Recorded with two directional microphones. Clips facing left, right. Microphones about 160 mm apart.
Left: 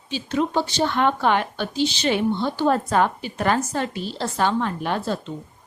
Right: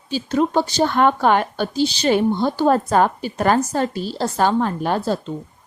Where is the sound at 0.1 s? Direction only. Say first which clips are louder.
Right 4 dB; 40° right (ahead or behind).